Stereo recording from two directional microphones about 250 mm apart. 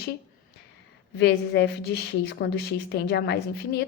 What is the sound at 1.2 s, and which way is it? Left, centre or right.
A woman's voice, left.